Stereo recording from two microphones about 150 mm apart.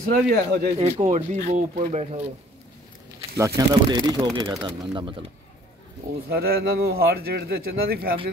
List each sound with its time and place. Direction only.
0.1 s speech: 80° right
0.7 s speech: 45° right (ahead or behind)
3.3 s speech: 20° right (ahead or behind)
6.2 s speech: 90° right